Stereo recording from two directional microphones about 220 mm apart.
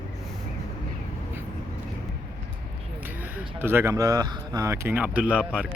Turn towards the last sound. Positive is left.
turn(degrees=-5)  # may be behind; listen again after turning